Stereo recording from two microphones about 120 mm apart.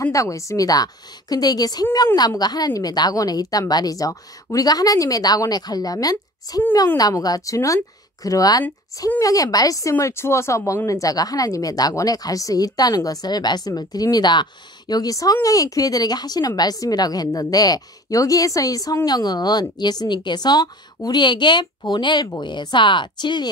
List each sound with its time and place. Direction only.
0.0 s speech: 25° left (ahead or behind)